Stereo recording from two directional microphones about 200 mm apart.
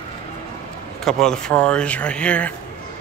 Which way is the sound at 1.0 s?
5° left (ahead or behind).